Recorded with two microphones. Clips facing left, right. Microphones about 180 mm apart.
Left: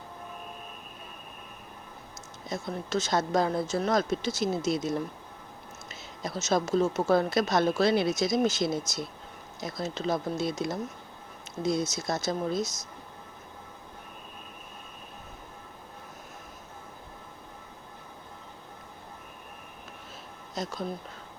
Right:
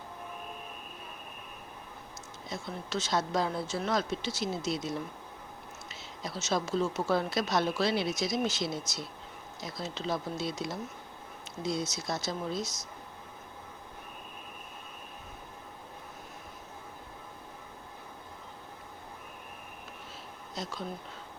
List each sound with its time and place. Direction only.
2.5 s a woman's voice: 45° left (ahead or behind)
20.6 s a woman's voice: 45° left (ahead or behind)